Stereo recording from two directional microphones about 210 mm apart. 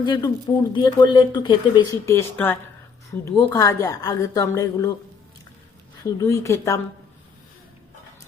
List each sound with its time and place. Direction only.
0.0 s speech: 20° left (ahead or behind)
6.1 s speech: 15° left (ahead or behind)